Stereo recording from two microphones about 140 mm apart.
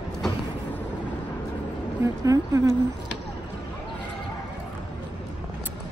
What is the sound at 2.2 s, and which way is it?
Speech, 25° right (ahead or behind).